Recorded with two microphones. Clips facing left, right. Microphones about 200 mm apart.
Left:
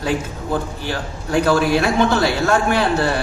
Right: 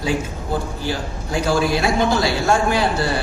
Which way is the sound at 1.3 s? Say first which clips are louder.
Left 3 dB; 60° left (ahead or behind).